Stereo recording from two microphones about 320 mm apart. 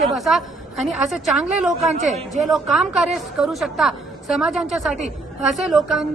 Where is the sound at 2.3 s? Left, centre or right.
Centre.